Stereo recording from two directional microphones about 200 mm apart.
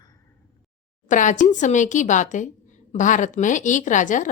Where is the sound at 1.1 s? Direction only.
40° left (ahead or behind).